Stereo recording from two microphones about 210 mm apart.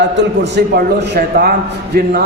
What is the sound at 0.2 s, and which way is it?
A man's voice, 55° right (ahead or behind).